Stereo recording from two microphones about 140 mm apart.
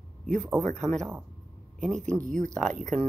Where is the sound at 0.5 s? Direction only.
5° left (ahead or behind).